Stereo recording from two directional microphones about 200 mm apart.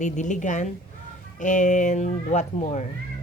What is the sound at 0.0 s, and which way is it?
A woman's voice, 40° left (ahead or behind).